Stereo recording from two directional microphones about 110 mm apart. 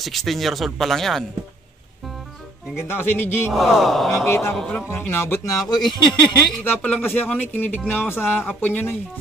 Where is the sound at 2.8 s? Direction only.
20° left (ahead or behind).